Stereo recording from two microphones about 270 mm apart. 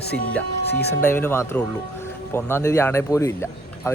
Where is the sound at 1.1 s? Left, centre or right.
Centre.